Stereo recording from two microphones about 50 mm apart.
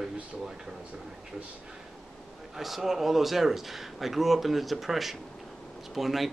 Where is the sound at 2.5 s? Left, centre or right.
Centre.